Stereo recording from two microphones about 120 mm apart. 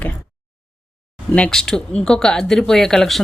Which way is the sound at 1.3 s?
10° left (ahead or behind).